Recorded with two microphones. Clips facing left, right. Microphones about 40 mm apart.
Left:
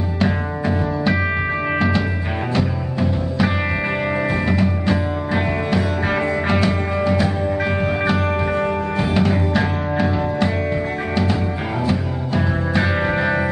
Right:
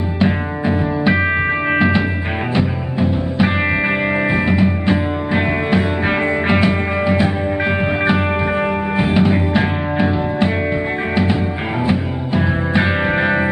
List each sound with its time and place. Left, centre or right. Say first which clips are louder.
0.2 s music: right 3 dB; right
11.8 s music: right 4 dB; right